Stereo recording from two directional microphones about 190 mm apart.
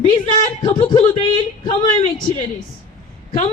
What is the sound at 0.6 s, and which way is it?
Speech, 25° left (ahead or behind).